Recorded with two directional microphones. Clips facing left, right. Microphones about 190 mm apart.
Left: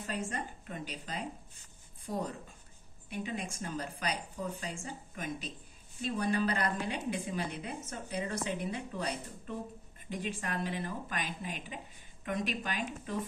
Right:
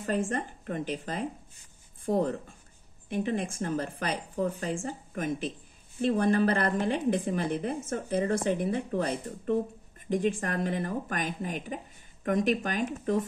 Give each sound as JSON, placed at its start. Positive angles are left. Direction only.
{"t": 0.0, "sound": "speech", "side_deg": -50}
{"t": 3.3, "sound": "speech", "side_deg": -50}